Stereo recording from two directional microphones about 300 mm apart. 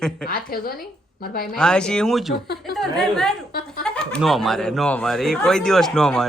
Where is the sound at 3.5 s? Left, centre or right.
Left.